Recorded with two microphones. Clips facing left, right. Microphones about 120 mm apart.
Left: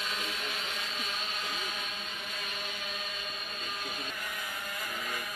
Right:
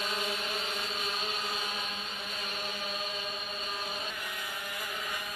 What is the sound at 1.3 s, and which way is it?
Chant, 30° right (ahead or behind).